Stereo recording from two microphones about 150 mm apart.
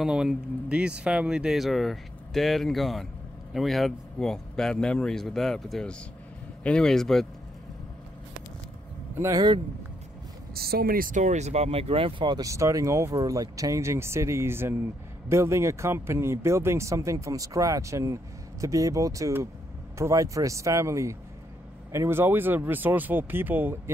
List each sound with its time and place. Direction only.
0.0 s speech: 5° right (ahead or behind)
9.2 s a man's voice: 25° right (ahead or behind)
10.5 s a man's voice: 90° right; by 23.8 s 15° right (ahead or behind)